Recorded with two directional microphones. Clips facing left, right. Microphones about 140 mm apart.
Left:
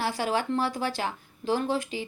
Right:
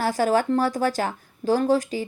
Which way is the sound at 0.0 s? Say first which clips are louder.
Right 7 dB; 45° right (ahead or behind).